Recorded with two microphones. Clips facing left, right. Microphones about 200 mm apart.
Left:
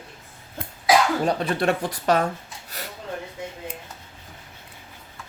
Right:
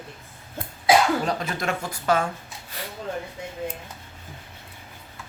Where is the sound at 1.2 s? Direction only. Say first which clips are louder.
Left 5 dB; 35° left (ahead or behind).